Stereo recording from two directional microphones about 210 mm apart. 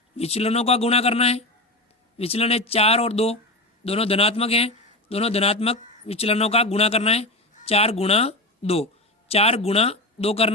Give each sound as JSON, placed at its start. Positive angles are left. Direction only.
{"t": 0.2, "sound": "a man's voice", "side_deg": 30}